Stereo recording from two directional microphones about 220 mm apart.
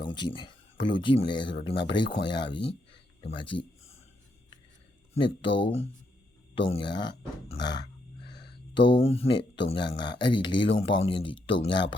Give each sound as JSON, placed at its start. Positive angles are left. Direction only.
{"t": 0.0, "sound": "speech", "side_deg": 20}
{"t": 5.1, "sound": "speech", "side_deg": 20}
{"t": 8.3, "sound": "a sound", "side_deg": 20}
{"t": 9.0, "sound": "speech", "side_deg": 25}